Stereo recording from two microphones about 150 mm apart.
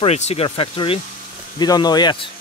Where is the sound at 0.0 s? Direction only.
45° left (ahead or behind).